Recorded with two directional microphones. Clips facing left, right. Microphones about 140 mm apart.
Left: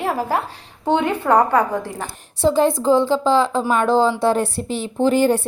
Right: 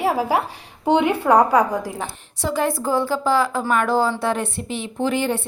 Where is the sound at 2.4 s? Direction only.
25° left (ahead or behind).